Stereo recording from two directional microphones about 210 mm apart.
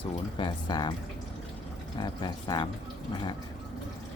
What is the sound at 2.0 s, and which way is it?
Speech, 20° left (ahead or behind).